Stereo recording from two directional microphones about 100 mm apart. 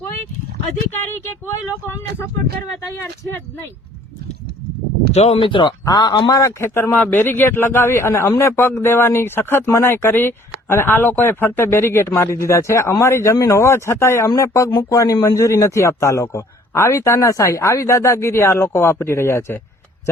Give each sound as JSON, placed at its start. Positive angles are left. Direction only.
{"t": 0.9, "sound": "a man's voice", "side_deg": 25}
{"t": 5.1, "sound": "speech", "side_deg": 90}
{"t": 5.5, "sound": "speech", "side_deg": 55}
{"t": 5.8, "sound": "speech", "side_deg": 45}
{"t": 6.6, "sound": "a man's voice", "side_deg": 25}
{"t": 6.9, "sound": "a man's voice", "side_deg": 15}